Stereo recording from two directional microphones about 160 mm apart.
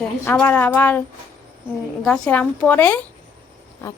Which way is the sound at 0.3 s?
10° left (ahead or behind).